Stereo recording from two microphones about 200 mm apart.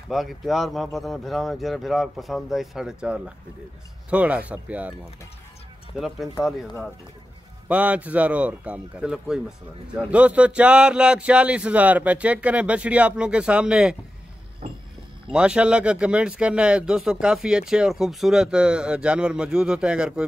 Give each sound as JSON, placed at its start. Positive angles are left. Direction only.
{"t": 0.1, "sound": "speech", "side_deg": 0}
{"t": 5.9, "sound": "speech", "side_deg": 0}
{"t": 7.6, "sound": "speech", "side_deg": -5}
{"t": 14.6, "sound": "a sound", "side_deg": -35}
{"t": 15.3, "sound": "speech", "side_deg": -5}